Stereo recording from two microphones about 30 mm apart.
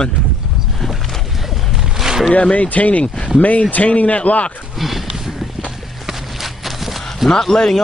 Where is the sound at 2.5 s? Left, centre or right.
Left.